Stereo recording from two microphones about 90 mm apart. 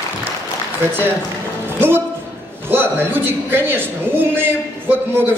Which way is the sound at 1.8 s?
25° right (ahead or behind).